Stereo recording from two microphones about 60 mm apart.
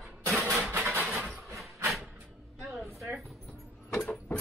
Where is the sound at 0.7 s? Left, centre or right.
Right.